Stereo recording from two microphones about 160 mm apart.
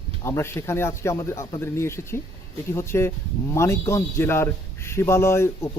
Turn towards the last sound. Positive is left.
turn(degrees=15)  # may be behind; listen again after turning